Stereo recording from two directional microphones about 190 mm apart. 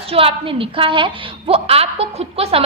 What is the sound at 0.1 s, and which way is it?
A woman's voice, 30° right (ahead or behind).